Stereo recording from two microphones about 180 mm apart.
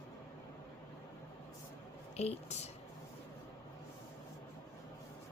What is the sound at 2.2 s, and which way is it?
Speech, 35° left (ahead or behind).